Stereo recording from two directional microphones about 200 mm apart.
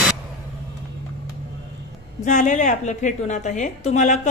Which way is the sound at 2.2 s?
40° left (ahead or behind).